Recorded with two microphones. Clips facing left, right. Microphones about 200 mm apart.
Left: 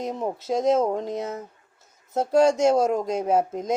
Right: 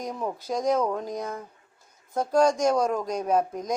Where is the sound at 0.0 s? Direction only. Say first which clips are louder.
Left 3 dB; 25° left (ahead or behind).